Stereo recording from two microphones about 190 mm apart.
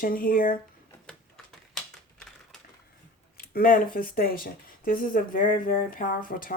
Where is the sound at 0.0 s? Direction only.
50° left (ahead or behind).